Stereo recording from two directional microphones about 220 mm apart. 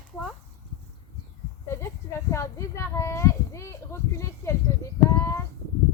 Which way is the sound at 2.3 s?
15° left (ahead or behind).